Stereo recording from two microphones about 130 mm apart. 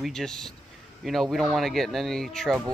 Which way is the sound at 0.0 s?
5° left (ahead or behind).